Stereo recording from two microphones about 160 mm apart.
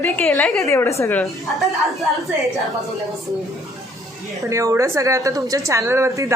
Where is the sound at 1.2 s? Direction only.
Centre (ahead or behind).